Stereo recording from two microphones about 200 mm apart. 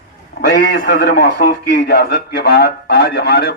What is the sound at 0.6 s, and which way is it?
A man's voice, 50° left (ahead or behind).